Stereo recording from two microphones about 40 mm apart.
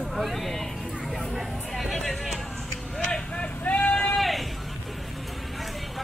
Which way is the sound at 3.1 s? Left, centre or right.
Left.